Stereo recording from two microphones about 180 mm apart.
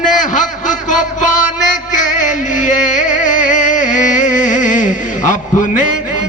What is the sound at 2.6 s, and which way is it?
Music, 45° left (ahead or behind).